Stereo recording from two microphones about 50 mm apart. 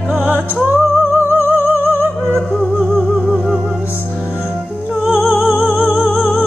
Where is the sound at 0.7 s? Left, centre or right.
Right.